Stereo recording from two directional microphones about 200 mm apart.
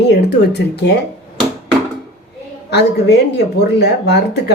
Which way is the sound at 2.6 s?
55° left (ahead or behind).